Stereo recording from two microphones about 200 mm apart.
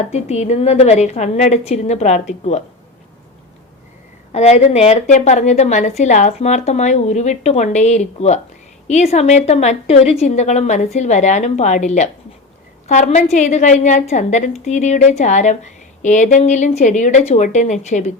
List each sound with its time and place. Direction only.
0.1 s a woman's voice: 35° left (ahead or behind)
4.3 s a woman's voice: 35° left (ahead or behind)